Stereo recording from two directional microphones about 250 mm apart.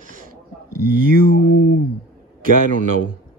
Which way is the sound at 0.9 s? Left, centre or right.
Right.